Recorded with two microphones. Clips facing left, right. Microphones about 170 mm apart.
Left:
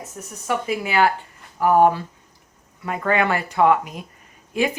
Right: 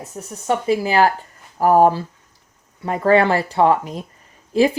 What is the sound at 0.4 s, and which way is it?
Speech, 30° right (ahead or behind).